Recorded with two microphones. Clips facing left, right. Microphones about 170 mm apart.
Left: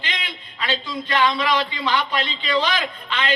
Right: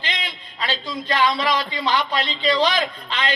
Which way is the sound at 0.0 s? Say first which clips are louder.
Right 1 dB; 35° right (ahead or behind).